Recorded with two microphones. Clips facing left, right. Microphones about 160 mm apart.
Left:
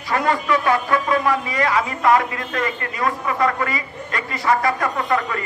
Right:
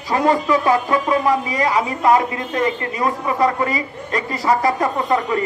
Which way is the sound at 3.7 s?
35° right (ahead or behind).